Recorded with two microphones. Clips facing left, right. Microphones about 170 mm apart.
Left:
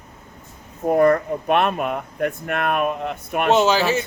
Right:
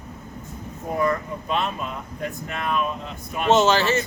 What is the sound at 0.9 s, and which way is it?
Speech, 55° left (ahead or behind).